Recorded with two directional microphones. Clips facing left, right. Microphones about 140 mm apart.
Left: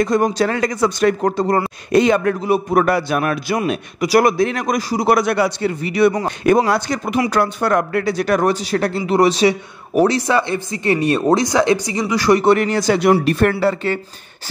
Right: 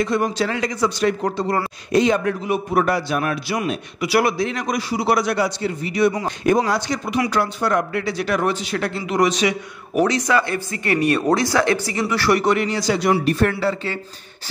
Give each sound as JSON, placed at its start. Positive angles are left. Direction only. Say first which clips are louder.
{"t": 0.0, "sound": "a man's voice", "louder": "left 4 dB", "side_deg": 45}
{"t": 1.9, "sound": "a man's voice", "louder": "left 3 dB", "side_deg": 60}
{"t": 4.0, "sound": "a man's voice", "louder": "left 5 dB", "side_deg": 45}
{"t": 12.5, "sound": "a man's voice", "louder": "left 4 dB", "side_deg": 50}
{"t": 13.2, "sound": "speech", "louder": "left 3 dB", "side_deg": 70}
{"t": 13.5, "sound": "a man's voice", "louder": "left 5 dB", "side_deg": 45}